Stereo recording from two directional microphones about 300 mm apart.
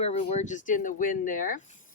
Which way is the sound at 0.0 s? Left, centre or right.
Left.